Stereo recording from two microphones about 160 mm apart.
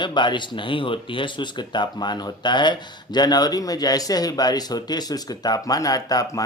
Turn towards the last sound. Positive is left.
turn(degrees=25)  # may be behind; listen again after turning